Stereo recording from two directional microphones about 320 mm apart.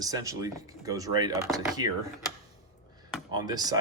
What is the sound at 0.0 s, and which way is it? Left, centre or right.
Speech, centre.